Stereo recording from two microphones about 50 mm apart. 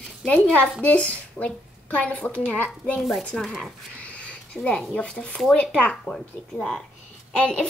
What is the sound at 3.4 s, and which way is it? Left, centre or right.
Speech, centre.